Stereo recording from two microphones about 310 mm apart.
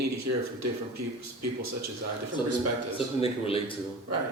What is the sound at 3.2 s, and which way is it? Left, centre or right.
Speech, centre.